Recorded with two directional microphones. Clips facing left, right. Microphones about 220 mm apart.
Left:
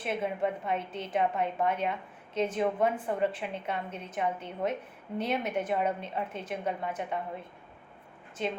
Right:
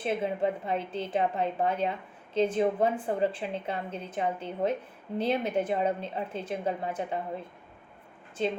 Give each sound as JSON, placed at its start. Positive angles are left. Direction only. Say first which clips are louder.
{"t": 0.0, "sound": "a woman's voice", "louder": "right 2 dB", "side_deg": -30}